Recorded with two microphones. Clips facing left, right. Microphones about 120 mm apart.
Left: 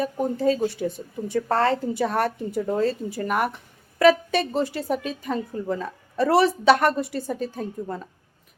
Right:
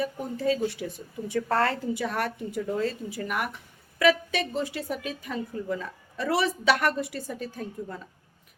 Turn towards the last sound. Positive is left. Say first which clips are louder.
# left 5 dB
turn(degrees=35)  # may be behind; listen again after turning